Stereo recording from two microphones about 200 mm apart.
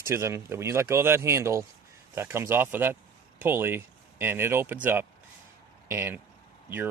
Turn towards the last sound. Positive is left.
turn(degrees=-10)  # may be behind; listen again after turning